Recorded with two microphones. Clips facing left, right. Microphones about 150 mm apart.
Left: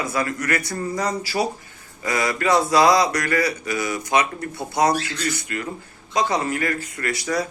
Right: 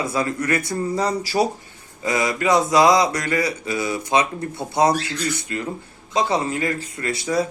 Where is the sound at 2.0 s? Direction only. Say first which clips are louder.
Right 1 dB; 20° right (ahead or behind).